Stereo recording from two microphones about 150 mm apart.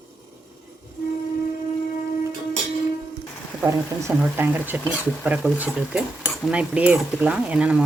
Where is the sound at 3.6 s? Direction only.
20° right (ahead or behind).